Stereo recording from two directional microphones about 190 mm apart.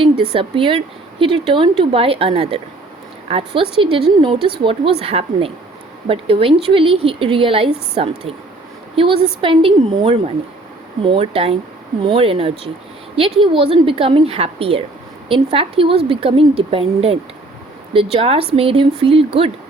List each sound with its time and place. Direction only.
0.0 s speech: 30° right (ahead or behind)